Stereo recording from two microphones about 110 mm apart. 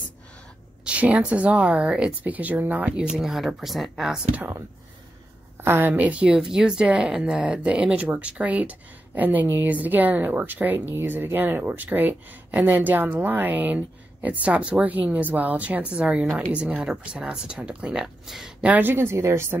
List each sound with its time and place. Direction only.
0.8 s a woman's voice: 10° right (ahead or behind)
3.2 s speech: 5° right (ahead or behind)
5.6 s a woman's voice: 20° right (ahead or behind)